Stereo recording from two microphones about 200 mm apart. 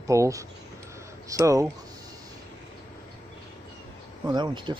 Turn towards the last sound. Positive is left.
turn(degrees=-20)  # may be behind; listen again after turning